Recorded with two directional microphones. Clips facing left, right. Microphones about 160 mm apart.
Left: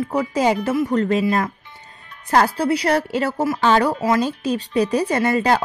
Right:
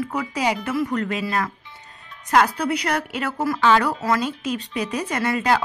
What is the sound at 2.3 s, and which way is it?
Speech, 30° left (ahead or behind).